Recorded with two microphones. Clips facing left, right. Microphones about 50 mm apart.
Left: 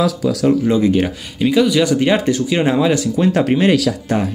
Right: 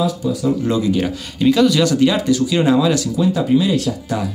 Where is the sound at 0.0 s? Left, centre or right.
Left.